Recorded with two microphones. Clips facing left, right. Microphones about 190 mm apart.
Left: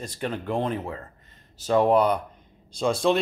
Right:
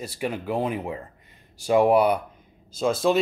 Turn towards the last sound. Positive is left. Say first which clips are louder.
# even
turn(degrees=0)  # may be behind; listen again after turning